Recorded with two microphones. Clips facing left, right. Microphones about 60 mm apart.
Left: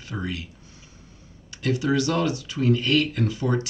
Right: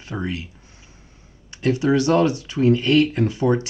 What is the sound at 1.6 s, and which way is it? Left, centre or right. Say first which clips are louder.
Speech: right 5 dB; right.